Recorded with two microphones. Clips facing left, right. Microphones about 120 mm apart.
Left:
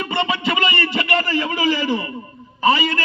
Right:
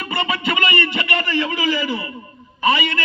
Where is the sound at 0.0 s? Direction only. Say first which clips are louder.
Left 2 dB; 25° left (ahead or behind).